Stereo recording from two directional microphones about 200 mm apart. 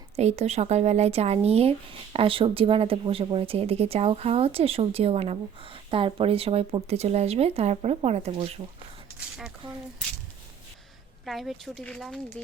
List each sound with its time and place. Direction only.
0.2 s speech: 30° right (ahead or behind)
9.6 s speech: 25° right (ahead or behind)
11.3 s speech: centre (ahead or behind)